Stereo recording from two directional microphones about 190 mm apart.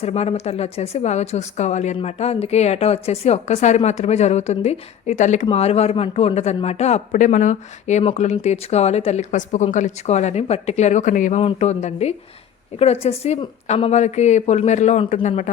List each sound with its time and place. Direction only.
0.0 s a woman's voice: 35° left (ahead or behind)